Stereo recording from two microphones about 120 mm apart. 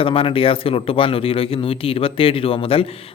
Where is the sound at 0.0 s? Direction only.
50° left (ahead or behind).